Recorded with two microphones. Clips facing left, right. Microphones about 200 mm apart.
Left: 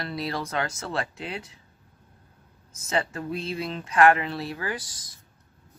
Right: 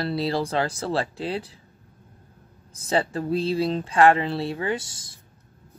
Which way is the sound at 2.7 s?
35° right (ahead or behind).